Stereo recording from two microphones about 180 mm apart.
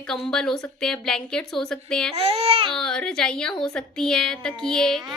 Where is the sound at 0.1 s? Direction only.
5° left (ahead or behind).